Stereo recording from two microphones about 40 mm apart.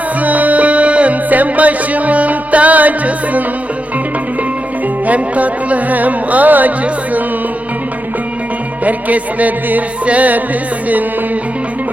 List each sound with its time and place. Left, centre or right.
0.2 s music: right
5.0 s music: right
8.8 s music: right